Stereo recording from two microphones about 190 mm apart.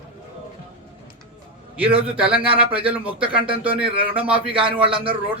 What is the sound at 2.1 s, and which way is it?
Speech, 30° right (ahead or behind).